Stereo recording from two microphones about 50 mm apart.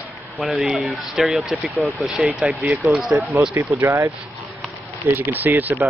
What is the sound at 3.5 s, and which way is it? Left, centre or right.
Speech, right.